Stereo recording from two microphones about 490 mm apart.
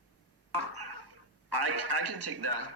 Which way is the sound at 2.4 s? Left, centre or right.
Right.